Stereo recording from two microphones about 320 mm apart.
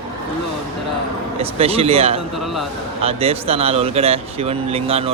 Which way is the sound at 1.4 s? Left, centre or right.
Centre.